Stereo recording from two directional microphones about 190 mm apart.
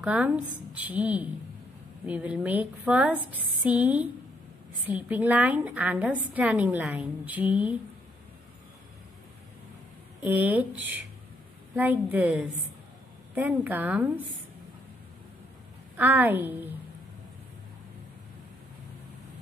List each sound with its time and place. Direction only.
0.0 s a woman's voice: 10° right (ahead or behind)
10.2 s a woman's voice: 10° right (ahead or behind)
16.0 s a woman's voice: 10° right (ahead or behind)